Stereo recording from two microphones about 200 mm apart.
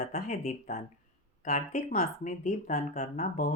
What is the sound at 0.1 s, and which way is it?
Speech, 35° left (ahead or behind).